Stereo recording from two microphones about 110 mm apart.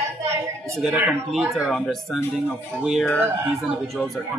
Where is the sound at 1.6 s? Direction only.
5° left (ahead or behind).